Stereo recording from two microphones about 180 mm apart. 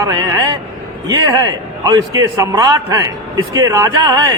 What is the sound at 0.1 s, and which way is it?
A man's voice, 20° right (ahead or behind).